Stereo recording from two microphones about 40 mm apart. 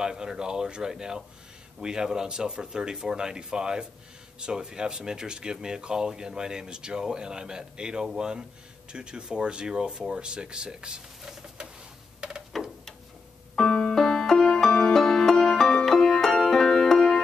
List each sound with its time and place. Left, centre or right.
0.0 s speech: centre
12.2 s tick-tock: right
13.6 s music: left